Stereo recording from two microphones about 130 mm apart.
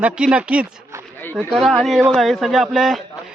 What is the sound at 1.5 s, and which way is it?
Speech, centre (ahead or behind).